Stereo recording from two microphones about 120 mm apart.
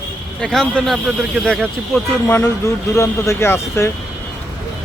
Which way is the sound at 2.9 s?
25° left (ahead or behind).